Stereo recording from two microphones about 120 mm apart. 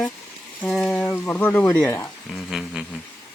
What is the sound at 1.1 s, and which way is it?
Speech, 15° left (ahead or behind).